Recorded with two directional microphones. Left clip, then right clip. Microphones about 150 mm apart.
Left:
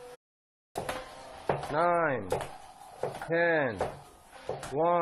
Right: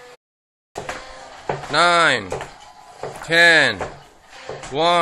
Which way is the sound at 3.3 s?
25° right (ahead or behind).